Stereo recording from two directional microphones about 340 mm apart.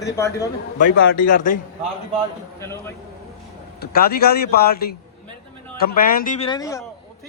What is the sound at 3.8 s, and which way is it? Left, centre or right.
A man's voice, left.